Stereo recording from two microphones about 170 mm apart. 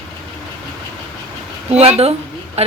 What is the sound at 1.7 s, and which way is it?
Speech, 40° right (ahead or behind).